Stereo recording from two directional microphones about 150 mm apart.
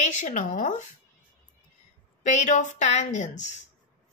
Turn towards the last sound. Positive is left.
turn(degrees=55)  # may be behind; listen again after turning